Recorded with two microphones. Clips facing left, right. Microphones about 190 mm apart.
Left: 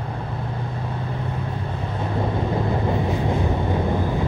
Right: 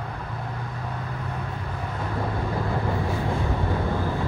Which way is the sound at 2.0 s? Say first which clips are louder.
Left 5 dB; 25° left (ahead or behind).